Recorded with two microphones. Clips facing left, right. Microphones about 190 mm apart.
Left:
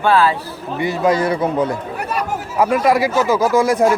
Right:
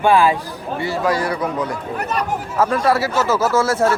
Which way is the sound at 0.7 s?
20° left (ahead or behind).